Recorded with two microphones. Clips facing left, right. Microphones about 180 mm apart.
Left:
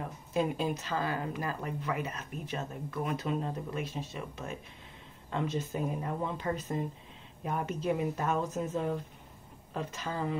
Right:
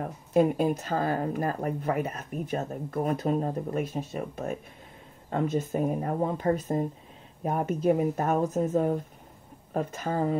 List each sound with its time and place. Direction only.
0.0 s speech: 50° right (ahead or behind)